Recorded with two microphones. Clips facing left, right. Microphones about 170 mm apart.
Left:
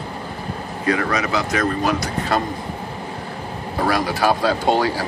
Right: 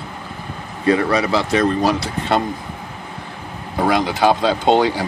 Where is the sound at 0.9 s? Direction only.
30° right (ahead or behind).